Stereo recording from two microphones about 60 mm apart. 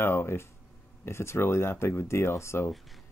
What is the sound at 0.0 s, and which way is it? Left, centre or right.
Speech, left.